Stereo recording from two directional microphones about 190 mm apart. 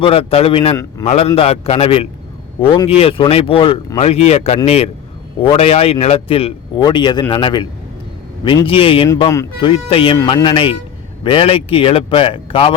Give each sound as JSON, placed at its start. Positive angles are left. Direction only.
{"t": 0.0, "sound": "a man's voice", "side_deg": 30}
{"t": 9.0, "sound": "a man's voice", "side_deg": 20}